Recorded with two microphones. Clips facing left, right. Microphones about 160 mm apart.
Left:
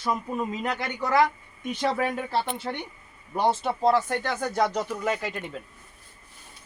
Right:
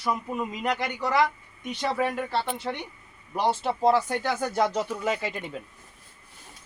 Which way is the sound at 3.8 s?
10° right (ahead or behind).